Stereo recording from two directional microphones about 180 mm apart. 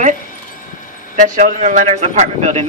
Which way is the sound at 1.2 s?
45° right (ahead or behind).